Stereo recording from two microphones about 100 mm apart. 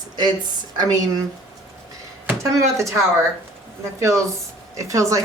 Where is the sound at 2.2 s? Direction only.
30° right (ahead or behind).